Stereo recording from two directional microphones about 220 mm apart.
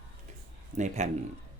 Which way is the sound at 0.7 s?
30° right (ahead or behind).